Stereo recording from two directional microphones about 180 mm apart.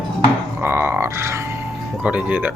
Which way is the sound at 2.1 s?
5° right (ahead or behind).